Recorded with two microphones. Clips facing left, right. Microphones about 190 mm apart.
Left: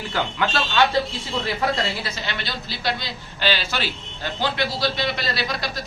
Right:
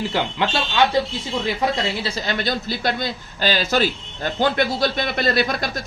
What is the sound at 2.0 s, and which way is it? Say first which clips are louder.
A man's voice: right 7 dB; 40° right (ahead or behind).